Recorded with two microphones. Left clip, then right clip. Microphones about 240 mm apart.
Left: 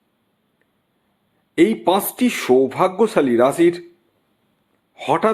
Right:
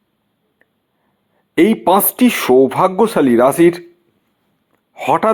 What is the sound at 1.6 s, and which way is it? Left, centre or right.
Speech, centre.